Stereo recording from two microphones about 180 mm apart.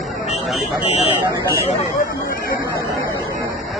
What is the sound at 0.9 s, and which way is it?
Speech, 35° left (ahead or behind).